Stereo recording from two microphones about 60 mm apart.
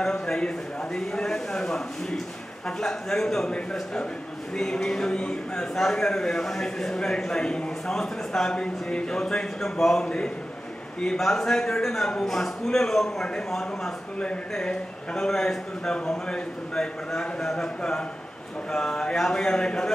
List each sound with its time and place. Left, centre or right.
0.0 s a man's voice: centre